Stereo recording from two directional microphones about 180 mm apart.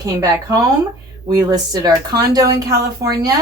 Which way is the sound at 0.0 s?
20° right (ahead or behind).